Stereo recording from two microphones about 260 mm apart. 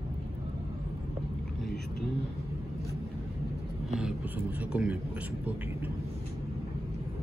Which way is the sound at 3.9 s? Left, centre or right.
Centre.